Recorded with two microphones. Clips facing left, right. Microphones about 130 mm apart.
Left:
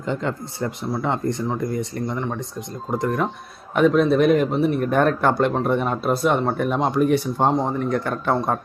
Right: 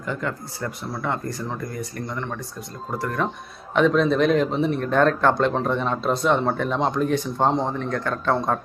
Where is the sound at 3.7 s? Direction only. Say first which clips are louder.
Left 2 dB; 5° left (ahead or behind).